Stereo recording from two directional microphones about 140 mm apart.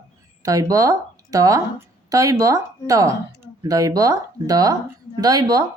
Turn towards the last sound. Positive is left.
turn(degrees=-25)  # may be behind; listen again after turning